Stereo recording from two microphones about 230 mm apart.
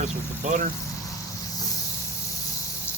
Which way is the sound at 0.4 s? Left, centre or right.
Right.